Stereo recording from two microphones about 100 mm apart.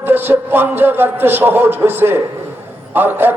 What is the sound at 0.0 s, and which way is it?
A man's voice, 20° right (ahead or behind).